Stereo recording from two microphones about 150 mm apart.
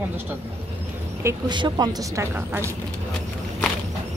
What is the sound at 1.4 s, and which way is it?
A woman's voice, 30° right (ahead or behind).